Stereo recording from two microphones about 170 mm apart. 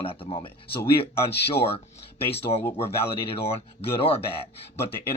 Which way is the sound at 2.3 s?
35° left (ahead or behind).